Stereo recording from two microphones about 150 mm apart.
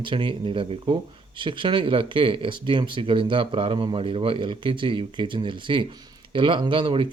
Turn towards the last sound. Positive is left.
turn(degrees=-35)  # may be behind; listen again after turning